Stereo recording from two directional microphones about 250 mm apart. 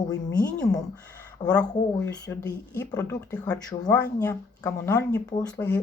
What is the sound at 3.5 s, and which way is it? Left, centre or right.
A woman's voice, centre.